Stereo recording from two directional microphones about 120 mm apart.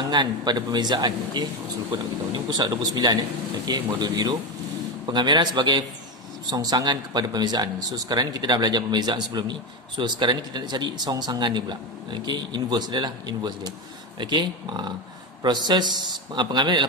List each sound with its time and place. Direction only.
0.1 s speech: 40° right (ahead or behind)